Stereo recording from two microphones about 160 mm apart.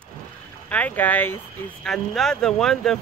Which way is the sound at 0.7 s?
10° left (ahead or behind).